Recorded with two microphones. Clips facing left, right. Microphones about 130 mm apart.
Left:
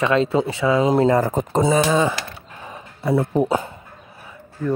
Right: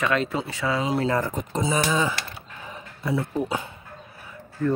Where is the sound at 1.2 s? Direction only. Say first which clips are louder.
Left 8 dB; 40° left (ahead or behind).